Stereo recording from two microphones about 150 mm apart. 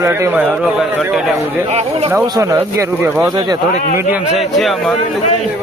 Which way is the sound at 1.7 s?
45° right (ahead or behind).